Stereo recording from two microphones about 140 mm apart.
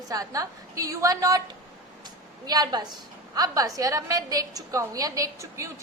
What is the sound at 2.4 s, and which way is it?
A woman's voice, 30° right (ahead or behind).